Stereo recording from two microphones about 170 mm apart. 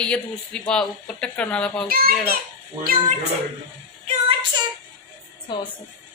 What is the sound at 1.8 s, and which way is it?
Speech, 60° right (ahead or behind).